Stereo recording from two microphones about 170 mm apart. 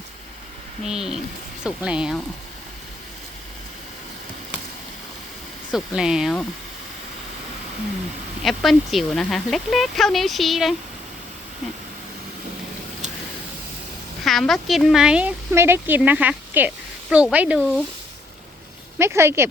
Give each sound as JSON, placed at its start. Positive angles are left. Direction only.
{"t": 0.9, "sound": "speech", "side_deg": -5}
{"t": 5.7, "sound": "speech", "side_deg": -5}
{"t": 8.4, "sound": "speech", "side_deg": 0}
{"t": 14.3, "sound": "speech", "side_deg": 0}
{"t": 18.9, "sound": "speech", "side_deg": -15}